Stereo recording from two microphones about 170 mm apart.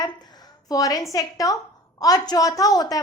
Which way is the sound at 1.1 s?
20° left (ahead or behind).